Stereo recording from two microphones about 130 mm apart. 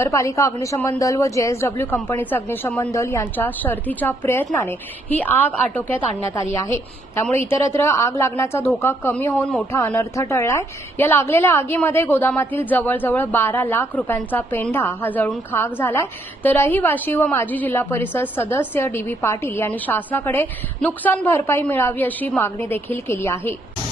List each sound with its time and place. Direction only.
0.0 s a woman's voice: 25° left (ahead or behind)
9.7 s a woman's voice: 20° left (ahead or behind)